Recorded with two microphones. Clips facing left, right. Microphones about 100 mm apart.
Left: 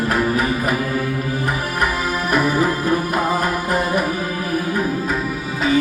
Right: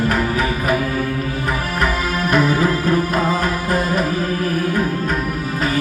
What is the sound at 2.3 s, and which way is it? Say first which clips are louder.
Music: right 1 dB; 15° left (ahead or behind).